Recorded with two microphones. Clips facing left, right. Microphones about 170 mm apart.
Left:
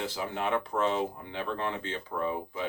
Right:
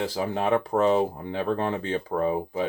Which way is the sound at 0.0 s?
40° right (ahead or behind).